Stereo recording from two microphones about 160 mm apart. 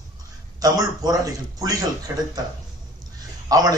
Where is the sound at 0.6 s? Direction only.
25° right (ahead or behind).